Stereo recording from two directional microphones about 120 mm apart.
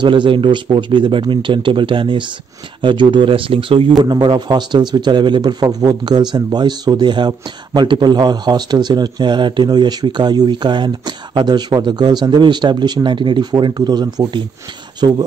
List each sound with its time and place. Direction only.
0.0 s speech: 40° right (ahead or behind)
4.0 s a man's voice: 35° right (ahead or behind)